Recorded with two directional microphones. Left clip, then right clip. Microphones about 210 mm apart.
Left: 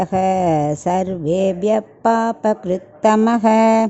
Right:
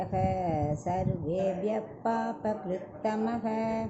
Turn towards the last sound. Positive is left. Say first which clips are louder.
# left 18 dB
turn(degrees=55)  # may be behind; listen again after turning